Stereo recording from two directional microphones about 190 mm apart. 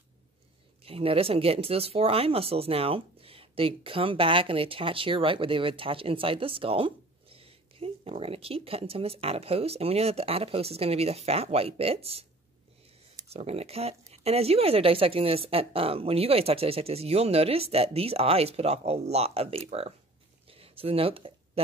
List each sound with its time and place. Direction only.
0.8 s speech: 30° right (ahead or behind)
13.3 s speech: 35° right (ahead or behind)
20.4 s a sound: 30° right (ahead or behind)